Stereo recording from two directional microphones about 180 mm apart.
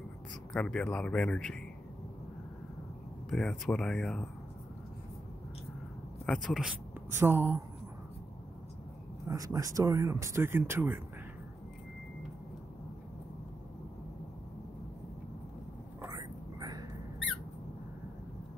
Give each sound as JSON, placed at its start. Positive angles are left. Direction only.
{"t": 0.5, "sound": "speech", "side_deg": 5}
{"t": 3.3, "sound": "speech", "side_deg": 5}
{"t": 6.2, "sound": "speech", "side_deg": 5}
{"t": 7.1, "sound": "speech", "side_deg": -15}
{"t": 9.3, "sound": "speech", "side_deg": -20}
{"t": 16.0, "sound": "whispering", "side_deg": -20}